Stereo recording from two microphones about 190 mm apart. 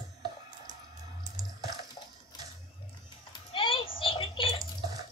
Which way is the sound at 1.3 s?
20° right (ahead or behind).